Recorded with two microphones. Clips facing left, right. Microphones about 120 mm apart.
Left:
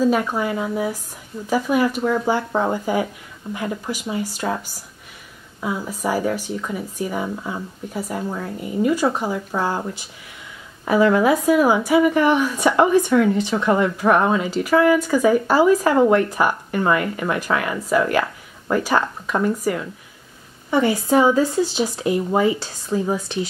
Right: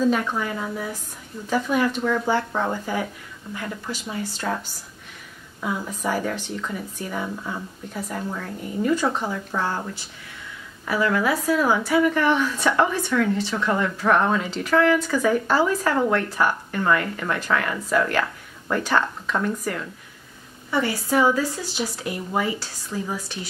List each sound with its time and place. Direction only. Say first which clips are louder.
0.0 s a woman's voice: left 3 dB; 10° left (ahead or behind)
20.7 s speech: left 5 dB; 20° left (ahead or behind)